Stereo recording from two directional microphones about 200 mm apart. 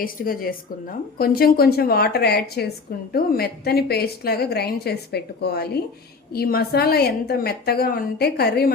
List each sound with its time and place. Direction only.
0.0 s a woman's voice: 45° left (ahead or behind)